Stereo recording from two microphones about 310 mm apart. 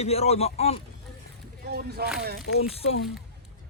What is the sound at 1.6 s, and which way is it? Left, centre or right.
Speech, right.